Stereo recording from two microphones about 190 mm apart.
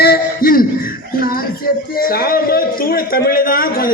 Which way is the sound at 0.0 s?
50° left (ahead or behind).